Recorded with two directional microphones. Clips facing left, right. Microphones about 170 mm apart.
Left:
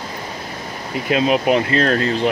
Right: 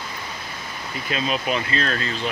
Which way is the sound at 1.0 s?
65° left (ahead or behind).